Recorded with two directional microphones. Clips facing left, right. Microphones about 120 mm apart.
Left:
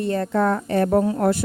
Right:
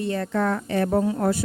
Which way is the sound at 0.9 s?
55° left (ahead or behind).